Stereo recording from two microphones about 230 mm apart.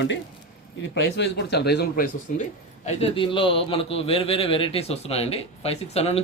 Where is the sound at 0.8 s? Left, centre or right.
Left.